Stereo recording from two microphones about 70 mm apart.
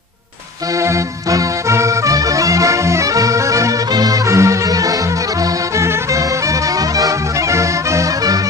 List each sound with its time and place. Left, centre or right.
0.8 s music: right
4.3 s music: right
5.4 s music: right